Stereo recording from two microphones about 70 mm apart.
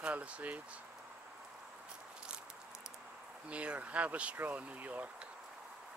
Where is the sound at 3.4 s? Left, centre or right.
Centre.